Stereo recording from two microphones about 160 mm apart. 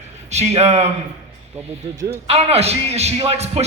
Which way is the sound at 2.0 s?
40° right (ahead or behind).